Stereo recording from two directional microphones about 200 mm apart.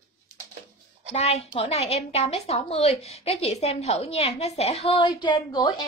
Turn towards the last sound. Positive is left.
turn(degrees=20)  # may be behind; listen again after turning